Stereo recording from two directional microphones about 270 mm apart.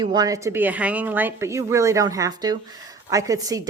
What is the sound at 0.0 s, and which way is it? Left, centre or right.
A woman's voice, centre.